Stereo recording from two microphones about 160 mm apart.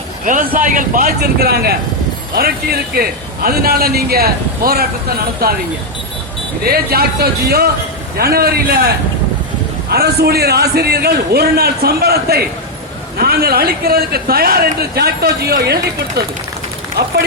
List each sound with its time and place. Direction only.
0.3 s a man's voice: 60° right (ahead or behind)
6.7 s a man's voice: 75° right (ahead or behind)
9.9 s a man's voice: 85° right